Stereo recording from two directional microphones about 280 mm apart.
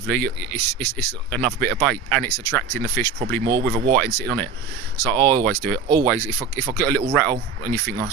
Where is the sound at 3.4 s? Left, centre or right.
Centre.